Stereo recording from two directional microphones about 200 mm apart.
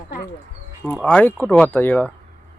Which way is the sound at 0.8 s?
5° left (ahead or behind).